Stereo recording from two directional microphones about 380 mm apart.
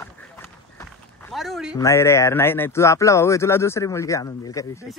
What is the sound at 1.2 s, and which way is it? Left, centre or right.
Speech, centre.